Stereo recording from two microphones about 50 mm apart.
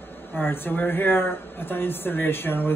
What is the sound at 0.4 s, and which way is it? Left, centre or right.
Speech, left.